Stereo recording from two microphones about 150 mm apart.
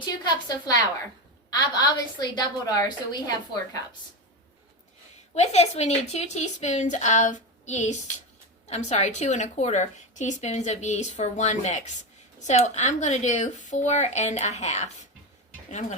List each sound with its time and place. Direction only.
0.0 s a woman's voice: 30° left (ahead or behind)
5.3 s a woman's voice: 45° left (ahead or behind)